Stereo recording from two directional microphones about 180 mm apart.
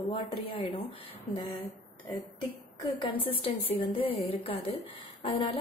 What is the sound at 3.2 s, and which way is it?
A woman's voice, 30° left (ahead or behind).